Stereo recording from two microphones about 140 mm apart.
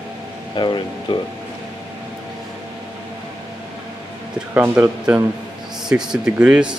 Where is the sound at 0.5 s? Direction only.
35° left (ahead or behind).